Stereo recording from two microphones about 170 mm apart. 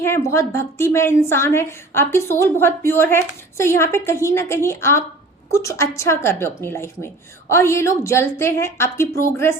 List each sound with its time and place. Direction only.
0.0 s a woman's voice: 15° left (ahead or behind)